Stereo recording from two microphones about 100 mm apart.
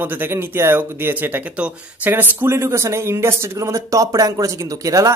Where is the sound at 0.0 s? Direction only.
20° right (ahead or behind).